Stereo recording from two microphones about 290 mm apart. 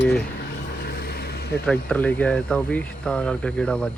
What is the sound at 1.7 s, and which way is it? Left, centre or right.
Speech, centre.